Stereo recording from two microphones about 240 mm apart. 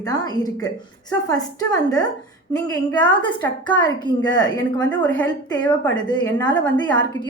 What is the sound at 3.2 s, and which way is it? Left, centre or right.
A woman's voice, centre.